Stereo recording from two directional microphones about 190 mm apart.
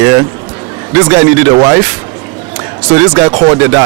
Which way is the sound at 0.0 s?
10° right (ahead or behind).